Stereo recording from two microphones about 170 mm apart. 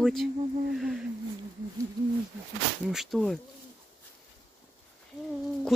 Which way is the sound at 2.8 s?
Centre (ahead or behind).